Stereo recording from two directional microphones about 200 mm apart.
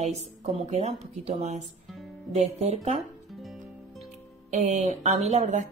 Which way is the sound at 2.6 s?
35° right (ahead or behind).